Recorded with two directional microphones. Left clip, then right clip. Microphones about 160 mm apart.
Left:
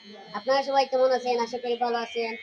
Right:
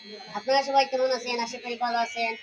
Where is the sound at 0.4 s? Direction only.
20° left (ahead or behind).